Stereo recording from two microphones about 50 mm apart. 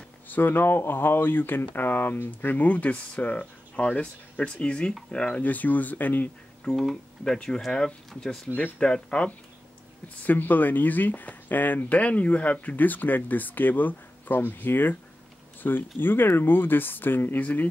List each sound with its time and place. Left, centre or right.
0.3 s speech: left
5.4 s speech: left
7.5 s speech: centre
8.7 s speech: centre
10.0 s speech: left
17.4 s speech: left